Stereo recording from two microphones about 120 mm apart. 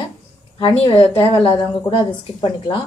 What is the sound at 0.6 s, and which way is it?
Speech, 40° left (ahead or behind).